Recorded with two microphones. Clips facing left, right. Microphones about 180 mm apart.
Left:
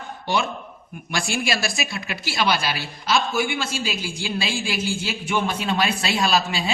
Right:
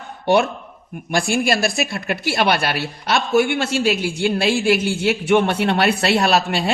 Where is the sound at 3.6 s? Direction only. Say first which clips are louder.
Right 9 dB; 65° right (ahead or behind).